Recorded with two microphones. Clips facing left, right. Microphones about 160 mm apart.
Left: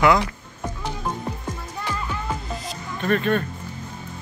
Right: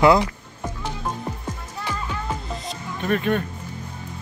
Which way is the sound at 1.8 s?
10° right (ahead or behind).